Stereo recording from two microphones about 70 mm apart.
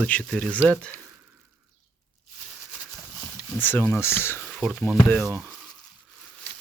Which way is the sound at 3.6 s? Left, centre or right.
Left.